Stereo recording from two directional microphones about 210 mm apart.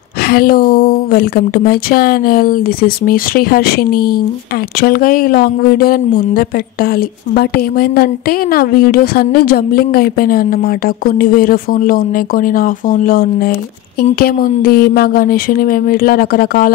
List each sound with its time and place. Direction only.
0.3 s speech: 45° left (ahead or behind)